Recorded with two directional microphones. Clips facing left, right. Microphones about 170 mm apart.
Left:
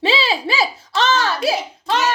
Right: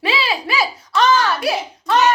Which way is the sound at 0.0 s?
25° left (ahead or behind).